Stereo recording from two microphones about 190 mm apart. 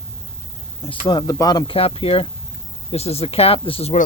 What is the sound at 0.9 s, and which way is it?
Speech, 25° left (ahead or behind).